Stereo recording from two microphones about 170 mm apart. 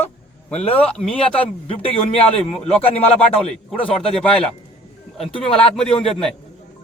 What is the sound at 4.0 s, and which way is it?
Speech, 5° left (ahead or behind).